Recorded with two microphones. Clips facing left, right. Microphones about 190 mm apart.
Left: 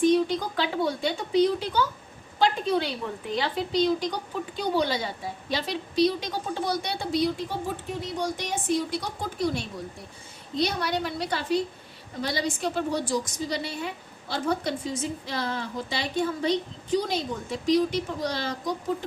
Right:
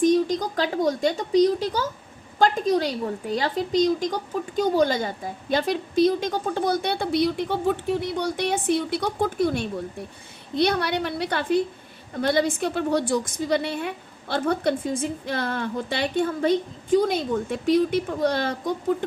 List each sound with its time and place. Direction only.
0.0 s a woman's voice: 45° right (ahead or behind)